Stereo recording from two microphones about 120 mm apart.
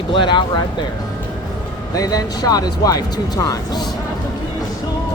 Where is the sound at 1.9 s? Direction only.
30° left (ahead or behind).